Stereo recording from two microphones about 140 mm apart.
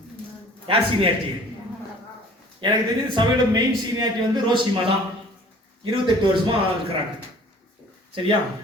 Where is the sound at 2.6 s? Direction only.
35° right (ahead or behind).